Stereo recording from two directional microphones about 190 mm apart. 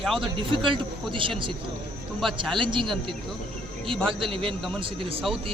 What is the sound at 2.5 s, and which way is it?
Speech, 25° right (ahead or behind).